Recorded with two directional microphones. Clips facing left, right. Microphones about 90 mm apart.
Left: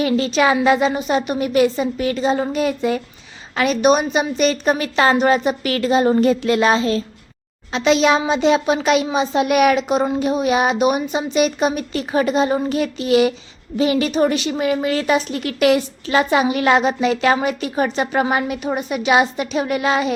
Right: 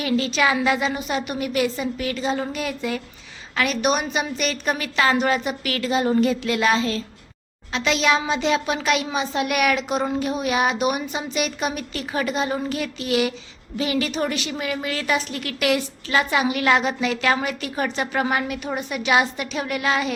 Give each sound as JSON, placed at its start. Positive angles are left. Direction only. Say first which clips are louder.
{"t": 0.0, "sound": "a woman's voice", "louder": "left 4 dB", "side_deg": 35}